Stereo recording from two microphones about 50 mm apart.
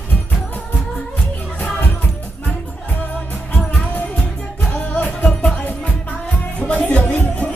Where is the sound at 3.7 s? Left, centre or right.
Left.